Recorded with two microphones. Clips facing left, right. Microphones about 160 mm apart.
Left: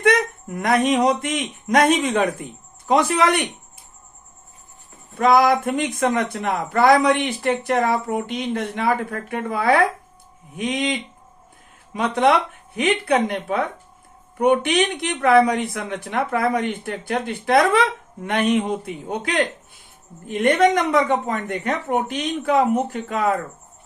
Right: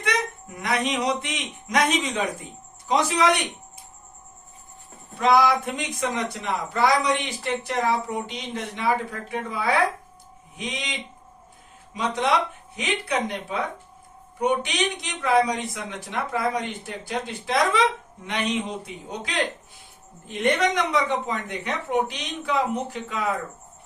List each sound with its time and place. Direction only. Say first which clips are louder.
0.0 s speech: left 8 dB; 50° left (ahead or behind)
5.1 s a woman's voice: left 3 dB; 50° left (ahead or behind)
11.9 s a woman's voice: left 5 dB; 55° left (ahead or behind)